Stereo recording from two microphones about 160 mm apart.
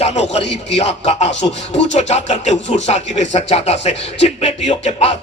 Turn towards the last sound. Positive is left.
turn(degrees=40)  # may be behind; listen again after turning